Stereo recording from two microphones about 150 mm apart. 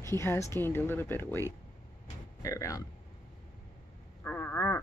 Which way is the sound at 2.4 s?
20° left (ahead or behind).